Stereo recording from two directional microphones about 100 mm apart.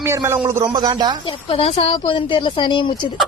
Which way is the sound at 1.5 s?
75° left (ahead or behind).